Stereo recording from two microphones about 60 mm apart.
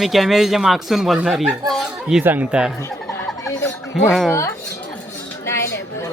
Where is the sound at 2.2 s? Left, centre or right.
Right.